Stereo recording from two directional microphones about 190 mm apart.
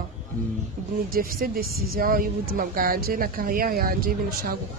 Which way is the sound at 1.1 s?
50° right (ahead or behind).